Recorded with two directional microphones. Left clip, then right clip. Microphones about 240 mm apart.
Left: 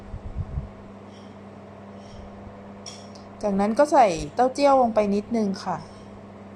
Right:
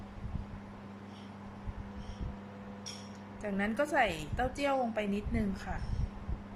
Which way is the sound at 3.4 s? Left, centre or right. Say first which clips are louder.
Left 13 dB; centre.